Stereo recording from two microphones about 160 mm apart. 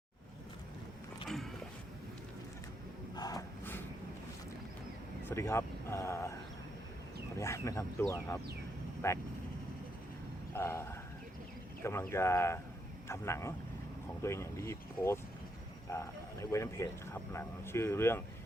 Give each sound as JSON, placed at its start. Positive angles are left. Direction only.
{"t": 3.2, "sound": "a sound", "side_deg": 25}
{"t": 5.3, "sound": "speech", "side_deg": 15}
{"t": 7.3, "sound": "speech", "side_deg": 15}
{"t": 9.0, "sound": "speech", "side_deg": 20}
{"t": 10.5, "sound": "speech", "side_deg": 15}